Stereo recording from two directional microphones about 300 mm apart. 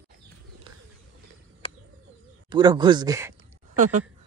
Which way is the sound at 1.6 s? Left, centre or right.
Centre.